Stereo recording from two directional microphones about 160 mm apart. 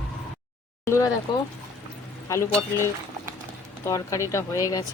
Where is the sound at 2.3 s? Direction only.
15° left (ahead or behind).